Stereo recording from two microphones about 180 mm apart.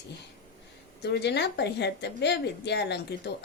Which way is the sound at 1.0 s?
70° left (ahead or behind).